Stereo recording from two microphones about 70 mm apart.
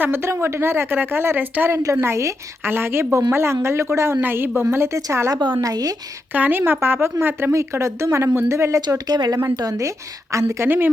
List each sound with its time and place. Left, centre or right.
0.0 s a woman's voice: right
4.7 s speech: right
5.3 s a woman's voice: right
6.3 s a woman's voice: right
7.5 s speech: right
9.1 s speech: right
10.3 s speech: right
10.7 s speech: right